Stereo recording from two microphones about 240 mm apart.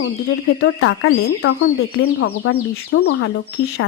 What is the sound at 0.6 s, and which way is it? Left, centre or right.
Speech, left.